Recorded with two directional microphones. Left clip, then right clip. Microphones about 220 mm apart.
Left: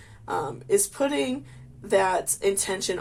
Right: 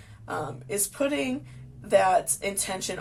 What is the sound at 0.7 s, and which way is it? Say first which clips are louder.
Speech: left 4 dB; 35° left (ahead or behind).